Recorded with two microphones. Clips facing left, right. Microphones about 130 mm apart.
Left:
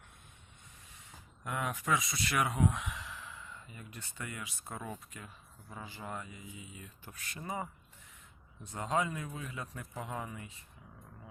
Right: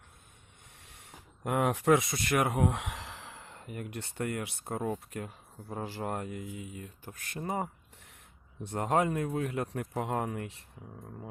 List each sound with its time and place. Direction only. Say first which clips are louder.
0.9 s a sound: right 2 dB; 70° right (ahead or behind)
1.5 s speech: right 9 dB; 65° right (ahead or behind)
4.7 s speech: right 10 dB; 40° right (ahead or behind)
5.7 s speech: right 8 dB; 65° right (ahead or behind)